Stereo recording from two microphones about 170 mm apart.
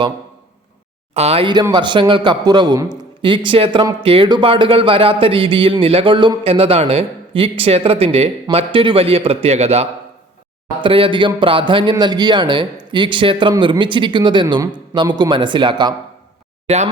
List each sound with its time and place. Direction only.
1.1 s a man's voice: 35° right (ahead or behind)
16.6 s speech: 40° right (ahead or behind)